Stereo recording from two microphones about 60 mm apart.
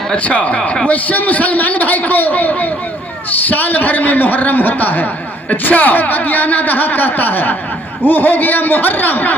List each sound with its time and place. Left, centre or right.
0.1 s a man's voice: left